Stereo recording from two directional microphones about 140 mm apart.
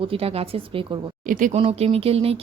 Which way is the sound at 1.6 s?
45° right (ahead or behind).